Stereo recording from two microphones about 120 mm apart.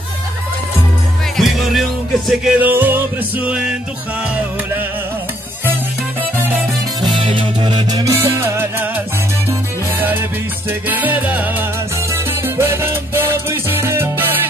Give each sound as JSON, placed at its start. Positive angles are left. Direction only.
{"t": 1.3, "sound": "music", "side_deg": 0}
{"t": 2.6, "sound": "music", "side_deg": -15}
{"t": 7.0, "sound": "music", "side_deg": -40}
{"t": 8.1, "sound": "salsa music", "side_deg": -20}
{"t": 9.5, "sound": "music", "side_deg": -15}